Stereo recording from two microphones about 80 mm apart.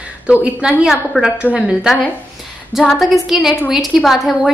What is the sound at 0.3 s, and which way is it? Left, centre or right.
A woman's voice, centre.